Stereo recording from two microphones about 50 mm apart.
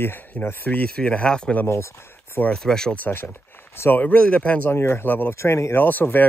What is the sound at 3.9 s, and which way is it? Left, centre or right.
Speech, left.